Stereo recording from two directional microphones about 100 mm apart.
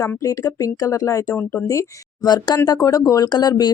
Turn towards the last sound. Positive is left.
turn(degrees=40)  # may be behind; listen again after turning